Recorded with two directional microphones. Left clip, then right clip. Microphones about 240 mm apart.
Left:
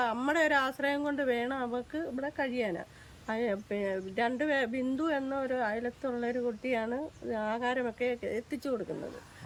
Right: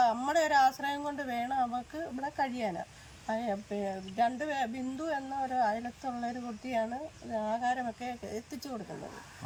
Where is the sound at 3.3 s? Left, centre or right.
Centre.